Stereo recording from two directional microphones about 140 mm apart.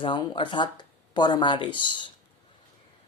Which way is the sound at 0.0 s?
35° left (ahead or behind).